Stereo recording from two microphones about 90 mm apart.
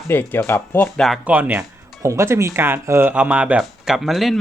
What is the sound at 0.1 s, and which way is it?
Speech, 20° left (ahead or behind).